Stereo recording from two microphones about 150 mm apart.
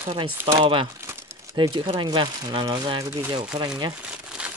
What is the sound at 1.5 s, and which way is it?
Speech, 30° right (ahead or behind).